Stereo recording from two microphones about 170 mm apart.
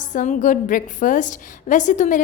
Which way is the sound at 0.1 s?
50° left (ahead or behind).